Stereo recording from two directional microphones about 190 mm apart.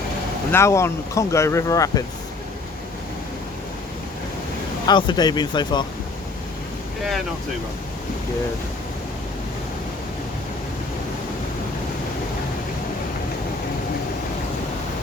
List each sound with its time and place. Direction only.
0.5 s speech: 15° left (ahead or behind)
4.9 s speech: 25° left (ahead or behind)